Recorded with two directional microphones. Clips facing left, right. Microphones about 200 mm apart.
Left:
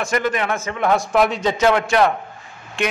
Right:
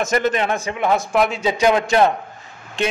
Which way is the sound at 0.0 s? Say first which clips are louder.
Right 2 dB; 25° right (ahead or behind).